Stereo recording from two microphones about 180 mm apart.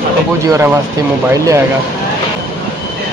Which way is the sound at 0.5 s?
15° right (ahead or behind).